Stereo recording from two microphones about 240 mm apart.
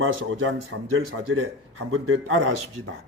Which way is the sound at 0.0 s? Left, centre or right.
Right.